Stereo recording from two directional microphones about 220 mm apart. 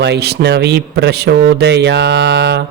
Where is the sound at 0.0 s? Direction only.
50° right (ahead or behind).